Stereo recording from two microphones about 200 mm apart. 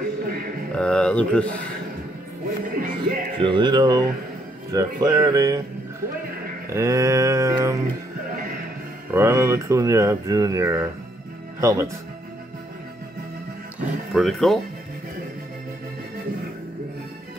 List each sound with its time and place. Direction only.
0.7 s speech: 5° left (ahead or behind)
2.7 s music: 45° right (ahead or behind)
3.3 s music: 25° right (ahead or behind)
6.7 s speech: 15° right (ahead or behind)
9.1 s speech: 15° right (ahead or behind)
14.1 s speech: centre (ahead or behind)